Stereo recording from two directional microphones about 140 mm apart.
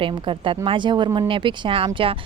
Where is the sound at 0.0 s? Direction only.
35° right (ahead or behind).